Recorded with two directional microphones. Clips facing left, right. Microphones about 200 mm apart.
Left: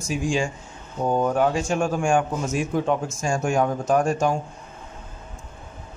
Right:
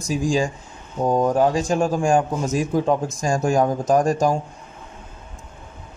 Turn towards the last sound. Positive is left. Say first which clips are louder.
# right 3 dB
turn(degrees=-35)  # may be behind; listen again after turning